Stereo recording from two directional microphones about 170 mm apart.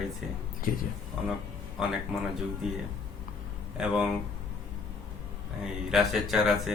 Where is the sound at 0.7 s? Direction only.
55° left (ahead or behind).